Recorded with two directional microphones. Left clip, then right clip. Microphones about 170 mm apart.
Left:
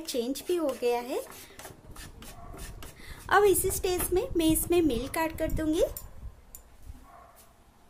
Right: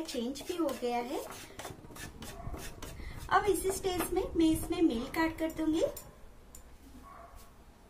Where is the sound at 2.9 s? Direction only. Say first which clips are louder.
Left 6 dB; 75° left (ahead or behind).